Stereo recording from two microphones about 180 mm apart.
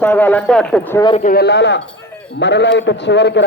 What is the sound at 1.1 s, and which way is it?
A man's voice, 50° left (ahead or behind).